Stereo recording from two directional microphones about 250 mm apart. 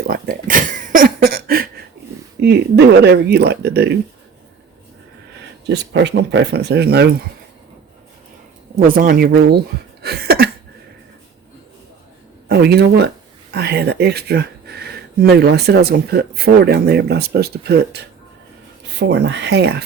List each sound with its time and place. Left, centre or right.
0.0 s a sound: right
2.4 s speech: right
5.6 s speech: right
8.7 s speech: right
10.0 s a sound: right
12.5 s speech: right